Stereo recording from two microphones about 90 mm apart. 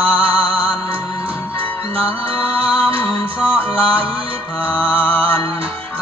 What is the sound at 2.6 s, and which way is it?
Music, 90° right.